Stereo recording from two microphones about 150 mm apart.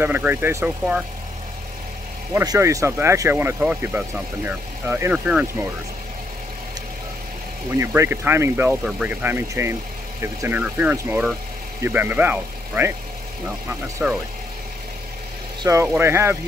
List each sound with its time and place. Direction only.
0.0 s speech: 15° right (ahead or behind)
2.3 s speech: 20° right (ahead or behind)
7.7 s speech: 20° right (ahead or behind)
15.6 s speech: 20° right (ahead or behind)